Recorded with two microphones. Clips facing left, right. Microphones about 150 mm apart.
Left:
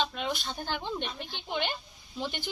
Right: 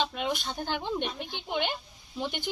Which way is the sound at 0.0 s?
15° right (ahead or behind).